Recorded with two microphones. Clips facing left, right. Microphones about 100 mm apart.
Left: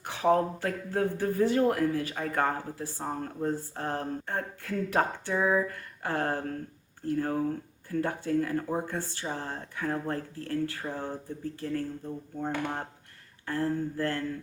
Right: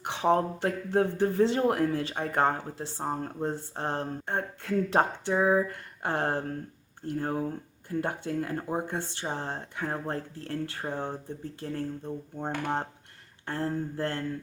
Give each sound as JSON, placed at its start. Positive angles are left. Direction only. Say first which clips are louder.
{"t": 0.0, "sound": "speech", "louder": "even", "side_deg": -25}